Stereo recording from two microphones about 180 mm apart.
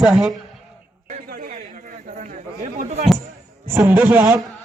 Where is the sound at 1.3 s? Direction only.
55° right (ahead or behind).